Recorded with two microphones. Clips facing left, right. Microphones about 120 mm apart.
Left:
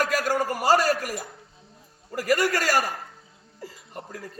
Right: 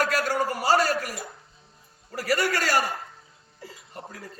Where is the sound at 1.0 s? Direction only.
45° left (ahead or behind).